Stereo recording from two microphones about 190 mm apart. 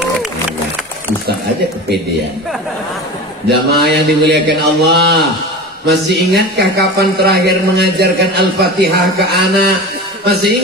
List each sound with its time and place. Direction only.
3.4 s a man's voice: 60° right (ahead or behind)
6.3 s a man's voice: 60° right (ahead or behind)